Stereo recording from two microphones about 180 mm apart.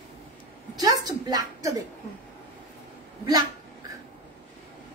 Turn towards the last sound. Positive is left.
turn(degrees=-20)  # may be behind; listen again after turning